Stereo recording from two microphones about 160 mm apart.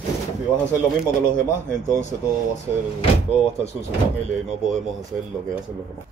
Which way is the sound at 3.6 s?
40° left (ahead or behind).